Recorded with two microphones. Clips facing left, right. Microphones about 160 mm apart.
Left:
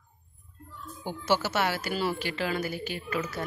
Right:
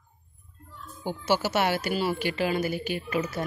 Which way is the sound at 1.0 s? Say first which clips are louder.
Right 2 dB; 10° right (ahead or behind).